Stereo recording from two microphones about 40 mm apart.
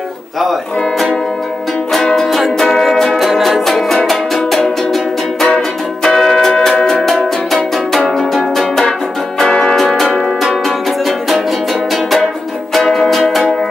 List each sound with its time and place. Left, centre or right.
0.4 s music: centre
2.2 s music: centre
2.6 s music: centre
3.1 s music: centre
3.6 s music: centre
6.0 s music: centre
9.5 s music: centre
9.8 s music: centre
12.7 s music: centre